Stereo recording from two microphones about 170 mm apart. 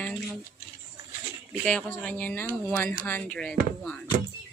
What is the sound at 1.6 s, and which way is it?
Speech, 10° left (ahead or behind).